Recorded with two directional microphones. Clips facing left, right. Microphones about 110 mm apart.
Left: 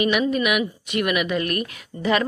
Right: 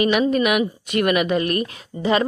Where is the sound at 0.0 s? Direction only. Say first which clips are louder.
Right 3 dB; 35° right (ahead or behind).